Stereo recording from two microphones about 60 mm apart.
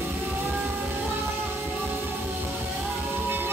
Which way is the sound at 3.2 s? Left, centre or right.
Right.